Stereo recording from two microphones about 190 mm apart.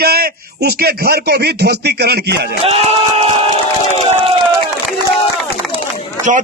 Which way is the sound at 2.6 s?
30° right (ahead or behind).